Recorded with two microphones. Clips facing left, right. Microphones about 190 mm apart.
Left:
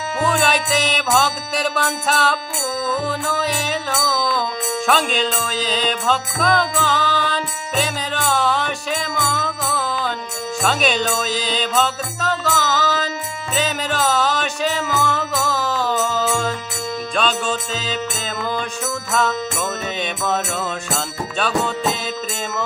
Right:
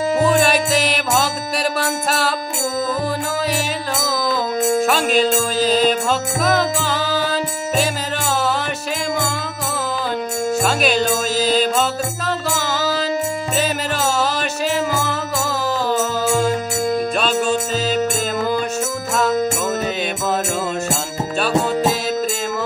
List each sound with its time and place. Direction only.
0.4 s music: 5° right (ahead or behind)
4.8 s music: 5° right (ahead or behind)
10.6 s music: 5° right (ahead or behind)